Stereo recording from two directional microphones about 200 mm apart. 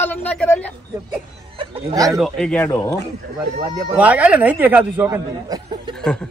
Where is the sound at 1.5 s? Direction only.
15° right (ahead or behind).